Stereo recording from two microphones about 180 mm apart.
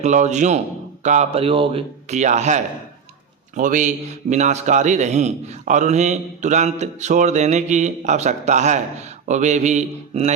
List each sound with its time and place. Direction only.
0.0 s a man's voice: 40° right (ahead or behind)